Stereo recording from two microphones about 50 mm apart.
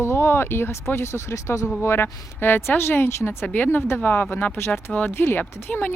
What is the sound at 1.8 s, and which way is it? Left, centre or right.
Speech, left.